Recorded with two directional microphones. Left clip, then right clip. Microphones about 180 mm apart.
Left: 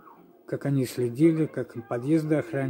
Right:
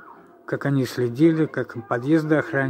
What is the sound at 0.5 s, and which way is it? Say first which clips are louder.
Speech: right 5 dB; 5° left (ahead or behind).